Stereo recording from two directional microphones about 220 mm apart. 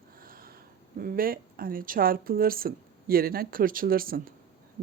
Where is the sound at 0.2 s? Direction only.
40° right (ahead or behind).